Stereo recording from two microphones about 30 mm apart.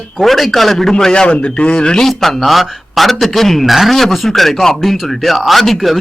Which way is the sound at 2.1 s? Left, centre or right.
Centre.